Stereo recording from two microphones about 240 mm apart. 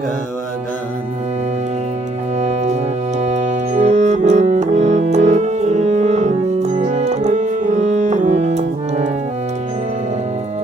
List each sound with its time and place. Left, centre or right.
2.4 s music: right